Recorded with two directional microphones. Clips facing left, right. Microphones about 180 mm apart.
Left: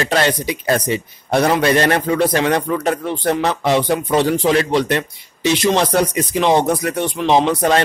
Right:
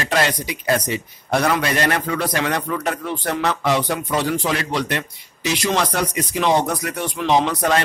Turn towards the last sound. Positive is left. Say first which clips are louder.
# left 4 dB
turn(degrees=30)  # may be behind; listen again after turning